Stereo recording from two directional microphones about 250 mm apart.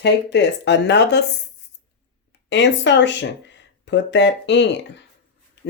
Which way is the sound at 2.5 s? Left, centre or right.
Left.